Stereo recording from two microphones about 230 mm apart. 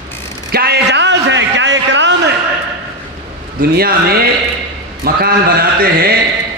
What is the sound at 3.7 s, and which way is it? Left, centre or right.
Speech, right.